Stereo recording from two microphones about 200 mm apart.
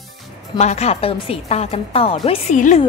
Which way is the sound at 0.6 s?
35° left (ahead or behind).